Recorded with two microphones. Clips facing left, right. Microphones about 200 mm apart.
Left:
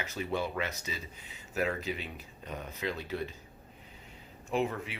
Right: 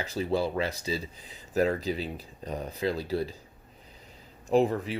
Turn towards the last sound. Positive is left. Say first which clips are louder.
# right 8 dB
turn(degrees=-35)  # may be behind; listen again after turning